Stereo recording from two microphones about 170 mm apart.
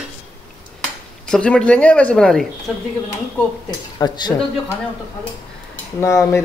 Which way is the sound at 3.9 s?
25° left (ahead or behind).